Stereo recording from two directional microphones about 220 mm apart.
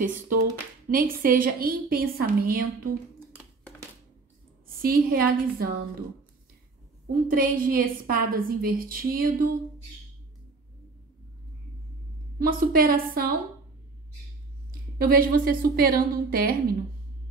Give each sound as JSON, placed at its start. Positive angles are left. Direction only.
{"t": 0.8, "sound": "a woman's voice", "side_deg": -40}
{"t": 4.8, "sound": "a woman's voice", "side_deg": -40}
{"t": 7.1, "sound": "a woman's voice", "side_deg": -40}
{"t": 12.4, "sound": "a woman's voice", "side_deg": -40}
{"t": 15.0, "sound": "a woman's voice", "side_deg": -40}